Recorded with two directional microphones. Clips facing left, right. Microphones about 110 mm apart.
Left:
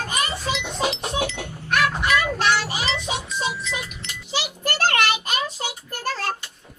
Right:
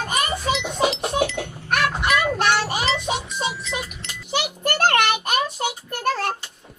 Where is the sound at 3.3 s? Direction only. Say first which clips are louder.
Even; 20° right (ahead or behind).